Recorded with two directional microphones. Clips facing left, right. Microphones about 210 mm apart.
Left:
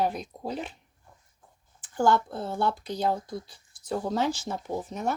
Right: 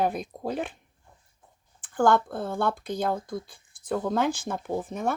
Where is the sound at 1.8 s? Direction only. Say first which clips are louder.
Right 2 dB; 50° right (ahead or behind).